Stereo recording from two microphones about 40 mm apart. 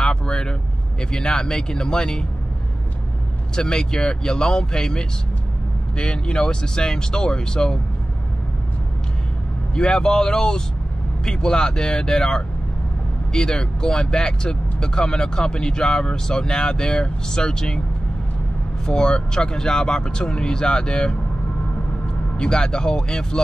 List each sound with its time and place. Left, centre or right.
0.0 s vehicle: left
1.1 s speech: centre
3.5 s speech: centre
9.8 s speech: left
18.9 s speech: centre